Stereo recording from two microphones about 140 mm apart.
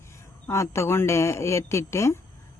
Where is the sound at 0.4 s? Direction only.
20° left (ahead or behind).